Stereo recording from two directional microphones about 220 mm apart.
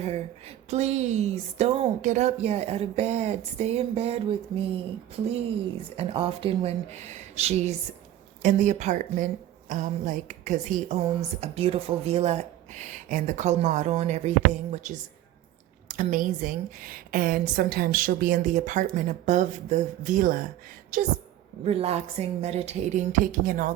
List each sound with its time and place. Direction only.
0.0 s a woman's voice: 30° right (ahead or behind)
6.0 s a woman's voice: 25° right (ahead or behind)
21.6 s a woman's voice: 25° right (ahead or behind)